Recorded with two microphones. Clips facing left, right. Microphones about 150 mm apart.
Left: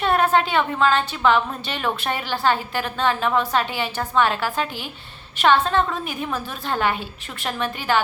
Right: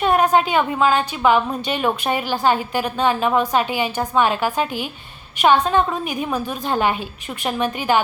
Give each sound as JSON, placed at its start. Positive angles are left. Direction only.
{"t": 0.0, "sound": "a woman's voice", "side_deg": -15}